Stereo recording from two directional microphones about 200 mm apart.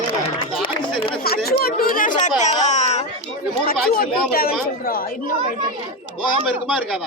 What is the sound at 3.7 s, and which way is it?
Speech, 45° left (ahead or behind).